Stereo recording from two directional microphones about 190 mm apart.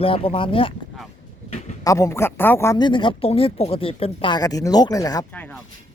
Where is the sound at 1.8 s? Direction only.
15° left (ahead or behind).